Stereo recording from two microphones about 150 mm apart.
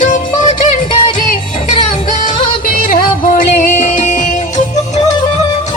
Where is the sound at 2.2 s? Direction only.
65° left (ahead or behind).